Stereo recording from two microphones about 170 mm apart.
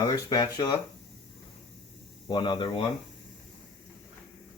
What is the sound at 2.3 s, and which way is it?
Speech, 30° left (ahead or behind).